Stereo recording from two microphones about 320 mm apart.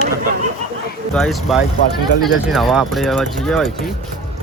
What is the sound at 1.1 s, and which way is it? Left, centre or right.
Speech, centre.